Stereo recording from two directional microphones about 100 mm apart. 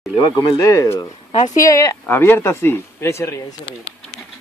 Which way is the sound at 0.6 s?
30° left (ahead or behind).